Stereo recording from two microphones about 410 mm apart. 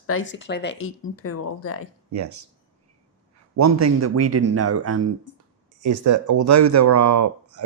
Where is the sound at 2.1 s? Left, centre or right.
Right.